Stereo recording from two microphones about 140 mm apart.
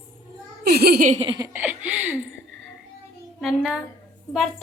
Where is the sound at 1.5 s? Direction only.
15° right (ahead or behind).